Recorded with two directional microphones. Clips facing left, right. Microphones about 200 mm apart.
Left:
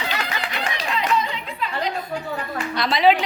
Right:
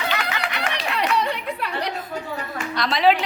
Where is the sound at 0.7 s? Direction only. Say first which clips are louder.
Left 1 dB; 70° right (ahead or behind).